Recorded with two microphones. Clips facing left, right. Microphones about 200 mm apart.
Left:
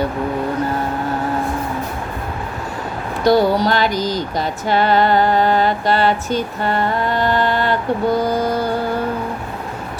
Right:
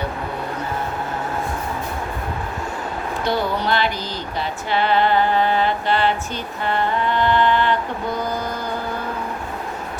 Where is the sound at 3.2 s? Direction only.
40° left (ahead or behind).